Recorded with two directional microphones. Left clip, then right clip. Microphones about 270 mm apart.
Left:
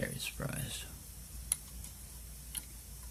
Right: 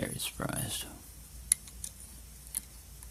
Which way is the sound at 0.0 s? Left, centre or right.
Right.